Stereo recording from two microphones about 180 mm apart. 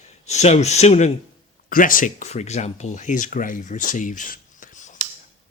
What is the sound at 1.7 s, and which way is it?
Speech, 50° left (ahead or behind).